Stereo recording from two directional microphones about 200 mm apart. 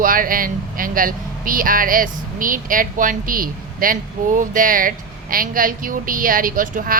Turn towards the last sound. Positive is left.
turn(degrees=-40)  # may be behind; listen again after turning